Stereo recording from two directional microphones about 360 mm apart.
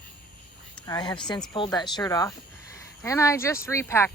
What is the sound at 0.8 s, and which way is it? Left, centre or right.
Speech, centre.